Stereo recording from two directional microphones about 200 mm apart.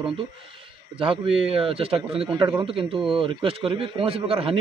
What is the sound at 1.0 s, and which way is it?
A man's voice, 25° right (ahead or behind).